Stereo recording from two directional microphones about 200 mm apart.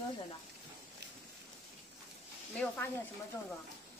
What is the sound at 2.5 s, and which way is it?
Speech, 10° left (ahead or behind).